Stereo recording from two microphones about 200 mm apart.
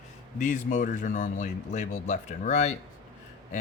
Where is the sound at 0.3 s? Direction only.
40° left (ahead or behind).